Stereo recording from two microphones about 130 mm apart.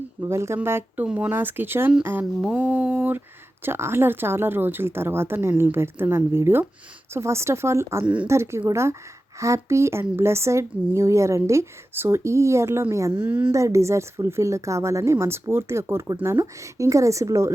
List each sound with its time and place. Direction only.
0.2 s a woman's voice: 20° right (ahead or behind)
1.0 s a woman's voice: 10° right (ahead or behind)
8.0 s speech: 10° right (ahead or behind)
8.3 s a woman's voice: 20° right (ahead or behind)
13.1 s speech: 10° right (ahead or behind)
13.5 s a woman's voice: 25° right (ahead or behind)